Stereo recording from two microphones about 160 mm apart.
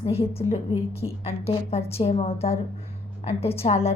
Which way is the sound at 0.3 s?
40° left (ahead or behind).